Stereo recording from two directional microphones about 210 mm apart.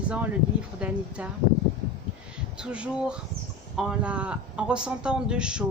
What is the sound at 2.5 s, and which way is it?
A man's voice, 5° right (ahead or behind).